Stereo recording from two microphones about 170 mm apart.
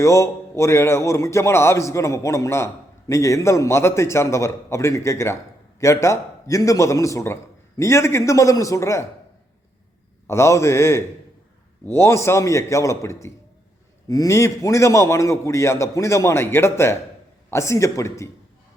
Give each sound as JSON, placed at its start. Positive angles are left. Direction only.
{"t": 0.0, "sound": "a man's voice", "side_deg": 15}
{"t": 10.2, "sound": "a man's voice", "side_deg": 15}